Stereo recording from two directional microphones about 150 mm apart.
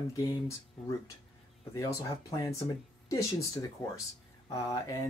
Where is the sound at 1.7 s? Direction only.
25° left (ahead or behind).